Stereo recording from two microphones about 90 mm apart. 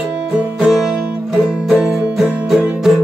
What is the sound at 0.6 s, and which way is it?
Music, centre (ahead or behind).